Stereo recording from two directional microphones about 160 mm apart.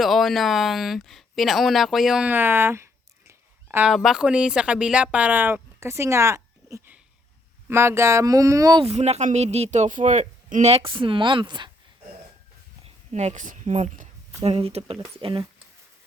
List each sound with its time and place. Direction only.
0.0 s speech: centre (ahead or behind)
3.9 s speech: centre (ahead or behind); by 8.8 s 20° right (ahead or behind)
8.8 s speech: 40° right (ahead or behind)
12.8 s a sound: 45° right (ahead or behind)
14.4 s speech: 40° right (ahead or behind)